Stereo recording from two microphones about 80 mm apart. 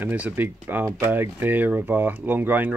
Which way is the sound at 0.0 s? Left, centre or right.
Right.